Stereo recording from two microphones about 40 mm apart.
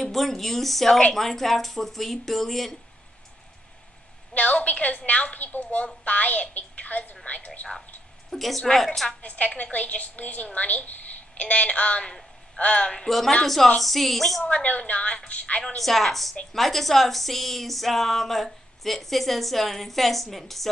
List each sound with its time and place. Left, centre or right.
0.0 s a woman's voice: centre
4.3 s a woman's voice: left
8.3 s a woman's voice: centre
9.2 s a woman's voice: left
13.7 s a woman's voice: centre
14.4 s a woman's voice: left
15.6 s a woman's voice: centre